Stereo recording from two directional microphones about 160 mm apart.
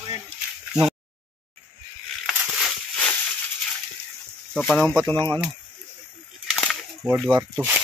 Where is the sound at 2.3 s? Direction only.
5° left (ahead or behind).